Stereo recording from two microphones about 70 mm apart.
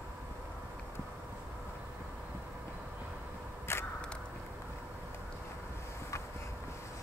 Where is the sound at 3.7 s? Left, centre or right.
Left.